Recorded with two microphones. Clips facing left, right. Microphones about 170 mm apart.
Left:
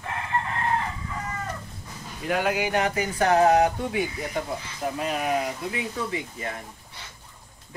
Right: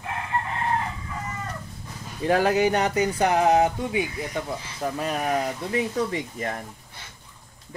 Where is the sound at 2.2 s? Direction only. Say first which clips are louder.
Right 5 dB; 40° right (ahead or behind).